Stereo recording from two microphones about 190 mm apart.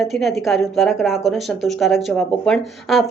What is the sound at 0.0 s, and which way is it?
A woman's voice, centre (ahead or behind).